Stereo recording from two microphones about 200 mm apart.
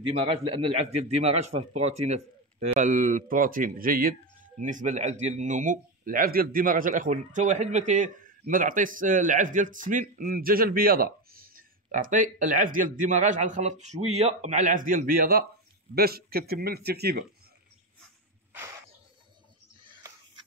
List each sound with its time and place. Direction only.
0.0 s a man's voice: 25° right (ahead or behind); by 17.2 s 55° right (ahead or behind)